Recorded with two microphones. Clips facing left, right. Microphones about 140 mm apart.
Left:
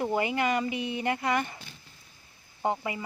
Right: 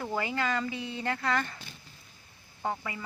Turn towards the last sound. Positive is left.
turn(degrees=20)  # may be behind; listen again after turning